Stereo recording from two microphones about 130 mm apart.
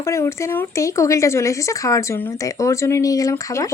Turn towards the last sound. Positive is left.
turn(degrees=25)  # may be behind; listen again after turning